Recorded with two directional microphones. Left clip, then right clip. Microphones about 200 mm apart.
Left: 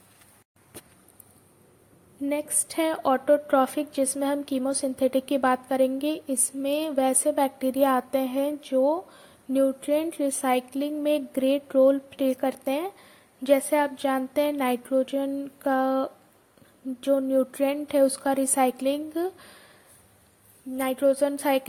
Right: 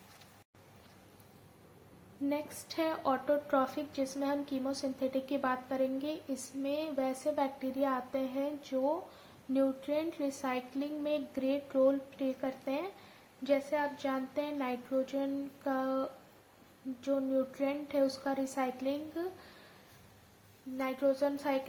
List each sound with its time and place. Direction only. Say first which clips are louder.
2.3 s a woman's voice: left 10 dB; 40° left (ahead or behind)
20.7 s speech: left 9 dB; 40° left (ahead or behind)